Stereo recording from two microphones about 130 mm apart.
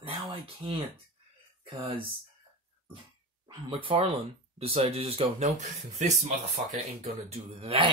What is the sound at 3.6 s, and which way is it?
Speech, 45° right (ahead or behind).